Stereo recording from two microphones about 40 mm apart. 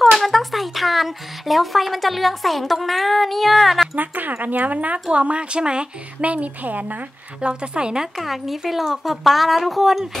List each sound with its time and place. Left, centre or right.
0.2 s speech: centre
3.9 s speech: right
6.2 s speech: right
7.4 s speech: right
8.2 s speech: centre